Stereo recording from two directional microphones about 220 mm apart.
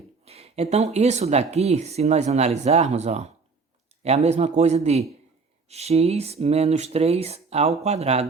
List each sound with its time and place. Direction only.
0.3 s speech: 25° right (ahead or behind)